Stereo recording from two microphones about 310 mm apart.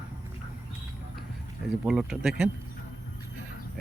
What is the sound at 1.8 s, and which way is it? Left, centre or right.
Speech, centre.